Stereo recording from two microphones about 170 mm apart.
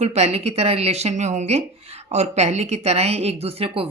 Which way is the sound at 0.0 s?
40° right (ahead or behind).